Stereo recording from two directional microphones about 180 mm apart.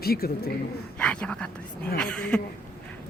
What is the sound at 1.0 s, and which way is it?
Speech, 5° left (ahead or behind).